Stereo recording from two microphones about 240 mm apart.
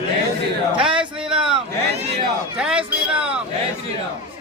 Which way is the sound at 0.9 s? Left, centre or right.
Right.